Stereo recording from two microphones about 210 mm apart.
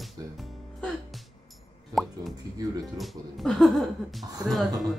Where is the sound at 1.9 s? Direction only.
15° right (ahead or behind).